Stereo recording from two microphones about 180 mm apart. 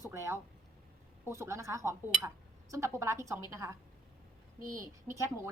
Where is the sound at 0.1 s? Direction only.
15° right (ahead or behind).